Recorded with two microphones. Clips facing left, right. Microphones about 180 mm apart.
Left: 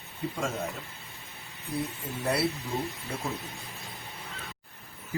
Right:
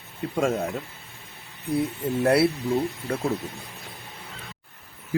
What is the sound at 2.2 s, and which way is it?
Speech, 65° right (ahead or behind).